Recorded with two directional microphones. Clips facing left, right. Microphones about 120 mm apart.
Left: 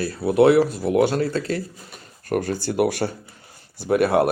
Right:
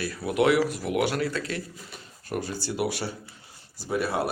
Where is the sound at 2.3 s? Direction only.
55° left (ahead or behind).